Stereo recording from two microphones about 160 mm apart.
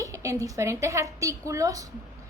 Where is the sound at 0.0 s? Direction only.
20° right (ahead or behind).